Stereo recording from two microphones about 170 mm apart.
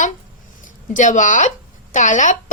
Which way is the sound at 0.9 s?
45° left (ahead or behind).